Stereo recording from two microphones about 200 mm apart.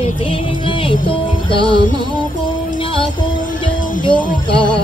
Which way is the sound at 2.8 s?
25° left (ahead or behind).